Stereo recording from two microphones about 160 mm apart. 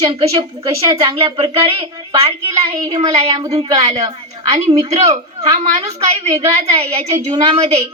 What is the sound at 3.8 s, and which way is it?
A woman's voice, 45° right (ahead or behind).